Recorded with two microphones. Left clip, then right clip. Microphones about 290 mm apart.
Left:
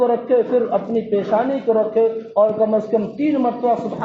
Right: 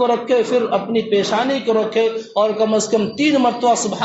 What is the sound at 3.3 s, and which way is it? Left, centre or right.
Speech, right.